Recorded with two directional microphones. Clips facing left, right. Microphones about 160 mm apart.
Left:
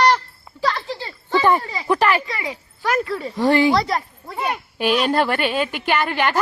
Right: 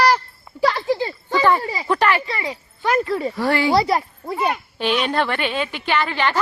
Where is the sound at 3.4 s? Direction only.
20° left (ahead or behind).